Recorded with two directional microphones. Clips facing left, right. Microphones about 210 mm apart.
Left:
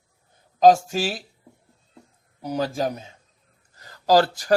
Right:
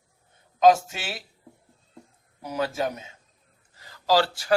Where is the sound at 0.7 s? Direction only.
35° left (ahead or behind).